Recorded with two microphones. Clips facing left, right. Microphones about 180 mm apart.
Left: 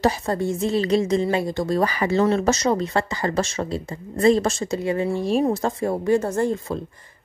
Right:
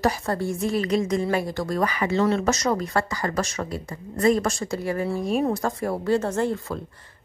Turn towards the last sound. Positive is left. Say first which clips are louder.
# left 2 dB
turn(degrees=15)  # may be behind; listen again after turning